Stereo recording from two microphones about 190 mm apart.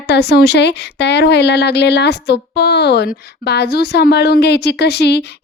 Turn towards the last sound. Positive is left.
turn(degrees=60)  # may be behind; listen again after turning